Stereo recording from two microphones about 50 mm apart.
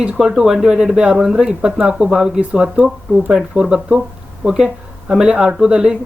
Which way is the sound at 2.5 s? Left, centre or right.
Right.